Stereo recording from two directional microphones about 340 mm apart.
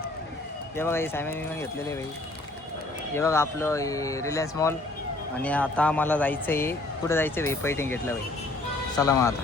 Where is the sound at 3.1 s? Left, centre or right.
Centre.